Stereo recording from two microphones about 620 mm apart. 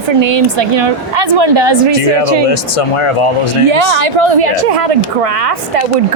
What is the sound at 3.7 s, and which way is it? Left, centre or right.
A woman's voice, right.